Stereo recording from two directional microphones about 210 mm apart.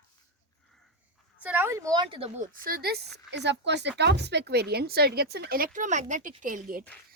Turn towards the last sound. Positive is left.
turn(degrees=-40)  # may be behind; listen again after turning